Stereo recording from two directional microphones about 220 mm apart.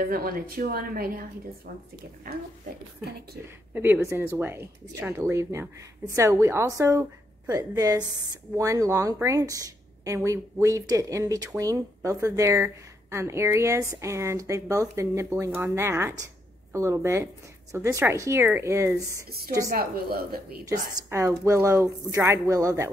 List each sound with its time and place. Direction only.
0.0 s a woman's voice: 40° right (ahead or behind)
3.7 s a woman's voice: 10° right (ahead or behind)
19.7 s speech: 45° right (ahead or behind)
20.6 s a woman's voice: 15° right (ahead or behind)